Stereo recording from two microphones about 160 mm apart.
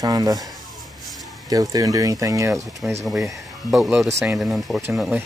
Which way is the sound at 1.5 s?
20° right (ahead or behind).